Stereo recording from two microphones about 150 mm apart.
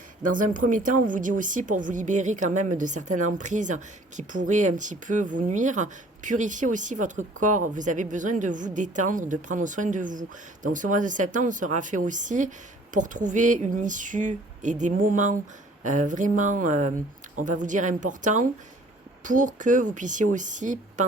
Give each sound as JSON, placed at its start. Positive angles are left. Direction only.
{"t": 0.2, "sound": "a woman's voice", "side_deg": -60}